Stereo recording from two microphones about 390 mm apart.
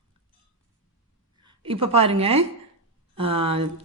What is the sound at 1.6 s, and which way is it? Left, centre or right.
Speech, centre.